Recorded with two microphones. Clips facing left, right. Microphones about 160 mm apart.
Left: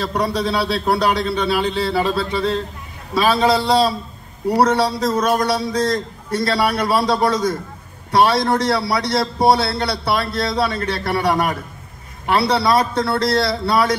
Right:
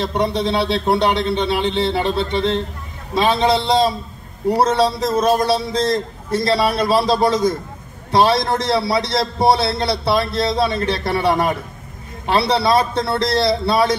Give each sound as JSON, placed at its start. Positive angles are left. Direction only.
{"t": 0.0, "sound": "a man's voice", "side_deg": -25}